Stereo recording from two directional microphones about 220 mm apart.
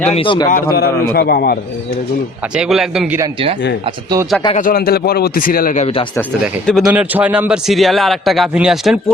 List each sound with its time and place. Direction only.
0.0 s a man's voice: 25° left (ahead or behind)
0.5 s a man's voice: 45° left (ahead or behind)
2.6 s a man's voice: centre (ahead or behind)
3.8 s speech: 15° right (ahead or behind)
4.5 s speech: 40° left (ahead or behind)
6.4 s a man's voice: centre (ahead or behind)